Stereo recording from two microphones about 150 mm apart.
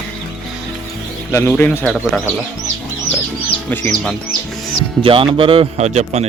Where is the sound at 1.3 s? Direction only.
15° left (ahead or behind).